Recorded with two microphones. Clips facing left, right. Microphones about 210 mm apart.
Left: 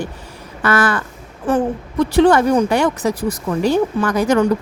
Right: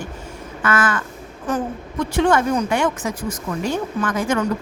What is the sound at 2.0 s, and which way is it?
Speech, 35° left (ahead or behind).